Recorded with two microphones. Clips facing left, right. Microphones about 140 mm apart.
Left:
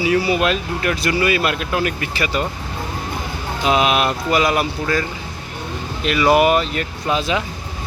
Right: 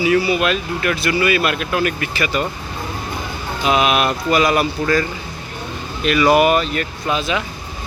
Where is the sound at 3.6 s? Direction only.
25° left (ahead or behind).